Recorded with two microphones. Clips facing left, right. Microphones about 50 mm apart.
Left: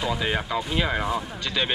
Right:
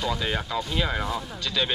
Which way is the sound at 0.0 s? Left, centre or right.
Centre.